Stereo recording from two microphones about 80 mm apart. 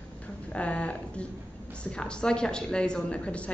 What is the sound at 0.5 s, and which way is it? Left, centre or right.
A woman's voice, centre.